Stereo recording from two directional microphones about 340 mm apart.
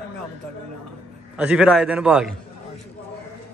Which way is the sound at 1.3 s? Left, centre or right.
Centre.